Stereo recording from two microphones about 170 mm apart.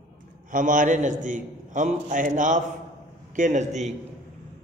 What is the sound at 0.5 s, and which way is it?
A man's voice, 50° right (ahead or behind).